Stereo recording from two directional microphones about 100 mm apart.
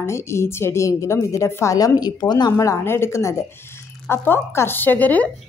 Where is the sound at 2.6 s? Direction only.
30° left (ahead or behind).